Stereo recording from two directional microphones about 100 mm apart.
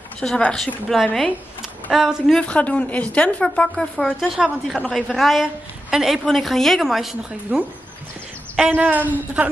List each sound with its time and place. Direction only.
0.2 s a woman's voice: 10° left (ahead or behind)
2.2 s a woman's voice: 10° left (ahead or behind); by 9.5 s 15° right (ahead or behind)